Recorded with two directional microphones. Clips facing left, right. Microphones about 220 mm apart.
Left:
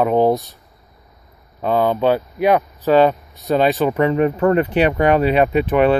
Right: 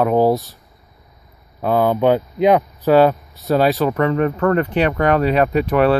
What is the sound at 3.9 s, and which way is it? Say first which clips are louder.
Speech: left 1 dB; 15° left (ahead or behind).